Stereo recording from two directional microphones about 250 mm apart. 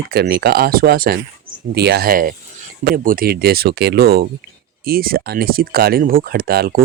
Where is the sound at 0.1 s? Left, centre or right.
Right.